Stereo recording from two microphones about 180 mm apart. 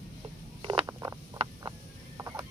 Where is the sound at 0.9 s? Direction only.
15° right (ahead or behind).